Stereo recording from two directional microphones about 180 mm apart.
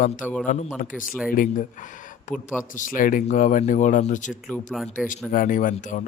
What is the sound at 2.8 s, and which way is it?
Speech, 50° left (ahead or behind).